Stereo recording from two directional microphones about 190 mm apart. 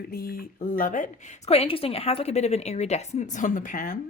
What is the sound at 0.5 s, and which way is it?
A woman's voice, 40° left (ahead or behind).